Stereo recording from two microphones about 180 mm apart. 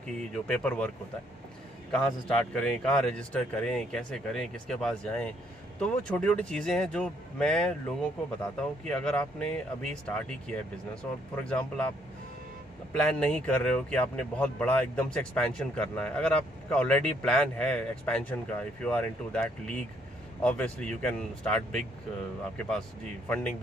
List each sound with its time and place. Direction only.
0.0 s a man's voice: 5° left (ahead or behind)
8.8 s a man's voice: 5° left (ahead or behind)
12.9 s a man's voice: 5° left (ahead or behind)